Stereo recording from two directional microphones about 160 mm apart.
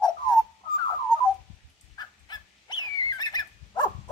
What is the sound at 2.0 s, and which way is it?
Fowl, 25° left (ahead or behind).